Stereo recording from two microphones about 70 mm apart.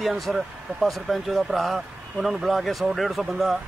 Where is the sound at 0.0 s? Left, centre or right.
Centre.